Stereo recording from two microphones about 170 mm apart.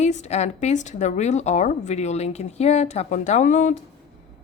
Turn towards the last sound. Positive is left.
turn(degrees=45)  # may be behind; listen again after turning